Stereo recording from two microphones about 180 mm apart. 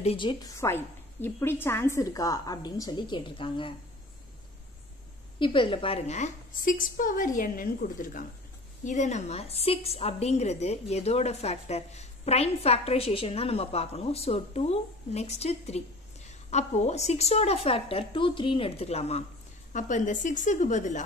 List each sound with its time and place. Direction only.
0.0 s a woman's voice: 30° left (ahead or behind)
0.6 s a woman's voice: 15° left (ahead or behind)
5.4 s a woman's voice: 30° left (ahead or behind)